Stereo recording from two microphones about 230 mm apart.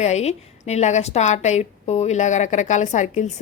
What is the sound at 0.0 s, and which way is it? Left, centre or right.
A woman's voice, left.